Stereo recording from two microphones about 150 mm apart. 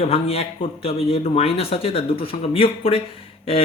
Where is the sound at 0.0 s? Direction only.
40° left (ahead or behind).